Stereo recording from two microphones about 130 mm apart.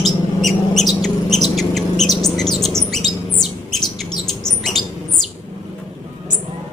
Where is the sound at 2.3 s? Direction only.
5° left (ahead or behind).